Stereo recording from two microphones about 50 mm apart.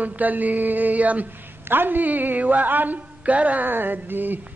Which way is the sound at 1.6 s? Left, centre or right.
Right.